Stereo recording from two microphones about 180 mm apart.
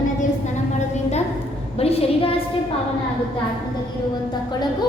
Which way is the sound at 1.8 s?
35° left (ahead or behind).